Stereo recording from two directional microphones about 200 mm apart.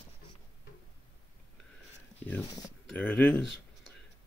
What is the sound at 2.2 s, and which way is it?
Speech, 10° left (ahead or behind).